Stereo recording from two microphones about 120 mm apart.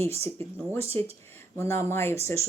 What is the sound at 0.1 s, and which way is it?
Speech, 60° right (ahead or behind).